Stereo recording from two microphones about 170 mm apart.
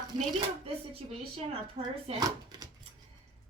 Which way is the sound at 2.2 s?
25° right (ahead or behind).